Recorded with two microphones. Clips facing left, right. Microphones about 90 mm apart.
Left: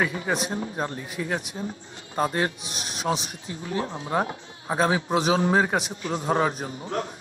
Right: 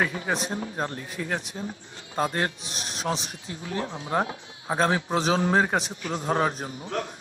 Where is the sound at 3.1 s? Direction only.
5° left (ahead or behind).